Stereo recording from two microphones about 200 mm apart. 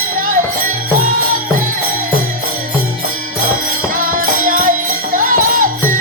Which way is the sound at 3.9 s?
45° right (ahead or behind).